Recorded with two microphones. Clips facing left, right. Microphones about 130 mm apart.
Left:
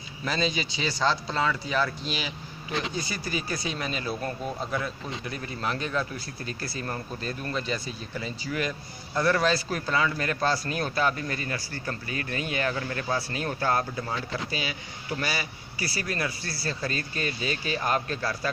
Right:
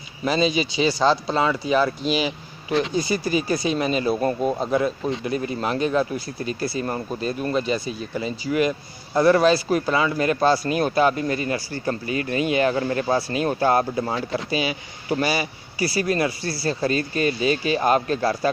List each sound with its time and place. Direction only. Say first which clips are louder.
0.2 s speech: right 8 dB; 15° right (ahead or behind)
18.2 s a man's voice: right 9 dB; 30° right (ahead or behind)